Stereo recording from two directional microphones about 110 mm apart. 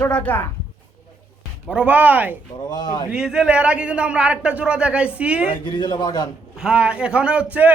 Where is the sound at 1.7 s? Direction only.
15° right (ahead or behind).